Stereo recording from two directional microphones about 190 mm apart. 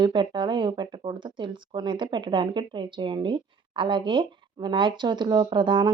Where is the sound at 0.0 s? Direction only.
25° right (ahead or behind).